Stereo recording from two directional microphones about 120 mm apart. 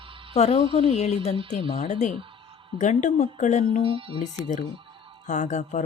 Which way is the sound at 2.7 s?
90° left.